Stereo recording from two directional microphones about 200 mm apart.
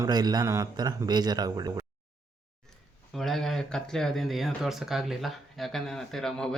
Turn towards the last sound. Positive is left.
turn(degrees=5)  # may be behind; listen again after turning